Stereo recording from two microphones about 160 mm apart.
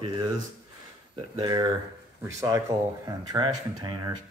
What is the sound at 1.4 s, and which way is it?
Speech, 25° right (ahead or behind).